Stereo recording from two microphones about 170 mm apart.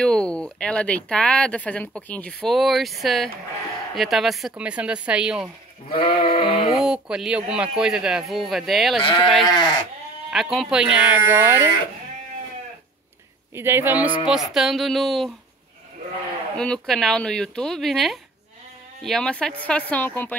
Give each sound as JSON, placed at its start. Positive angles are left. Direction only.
{"t": 0.0, "sound": "speech", "side_deg": 5}
{"t": 5.9, "sound": "sheep", "side_deg": 60}
{"t": 6.2, "sound": "sheep", "side_deg": 35}
{"t": 6.7, "sound": "speech", "side_deg": -5}
{"t": 9.0, "sound": "speech", "side_deg": 30}
{"t": 10.3, "sound": "speech", "side_deg": 0}
{"t": 13.6, "sound": "speech", "side_deg": -15}
{"t": 16.5, "sound": "speech", "side_deg": 5}